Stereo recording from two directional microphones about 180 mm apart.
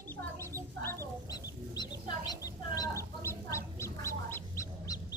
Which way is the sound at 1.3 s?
20° left (ahead or behind).